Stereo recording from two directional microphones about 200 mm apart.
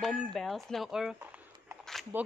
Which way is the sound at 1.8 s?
Centre (ahead or behind).